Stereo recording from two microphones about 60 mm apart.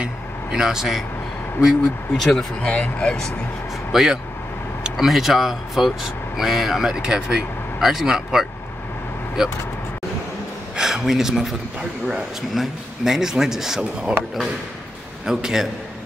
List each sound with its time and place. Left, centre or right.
0.0 s vehicle: centre
1.6 s a man's voice: centre
2.1 s speech: centre
2.6 s speech: centre
3.9 s a man's voice: centre
10.8 s a man's voice: centre
15.2 s a man's voice: centre